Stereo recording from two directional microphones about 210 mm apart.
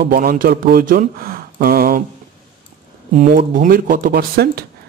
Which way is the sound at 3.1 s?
40° right (ahead or behind).